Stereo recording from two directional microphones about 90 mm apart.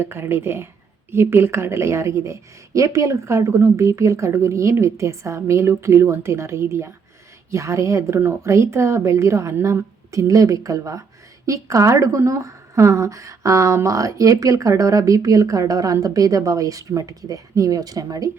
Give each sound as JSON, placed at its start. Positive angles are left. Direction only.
{"t": 0.0, "sound": "a woman's voice", "side_deg": -25}